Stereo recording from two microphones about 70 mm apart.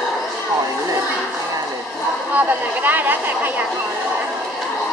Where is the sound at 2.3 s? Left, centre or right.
Right.